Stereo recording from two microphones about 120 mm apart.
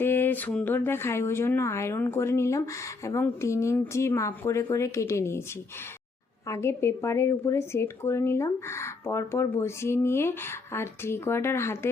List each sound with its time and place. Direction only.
0.0 s speech: 15° left (ahead or behind)
6.5 s speech: 20° left (ahead or behind)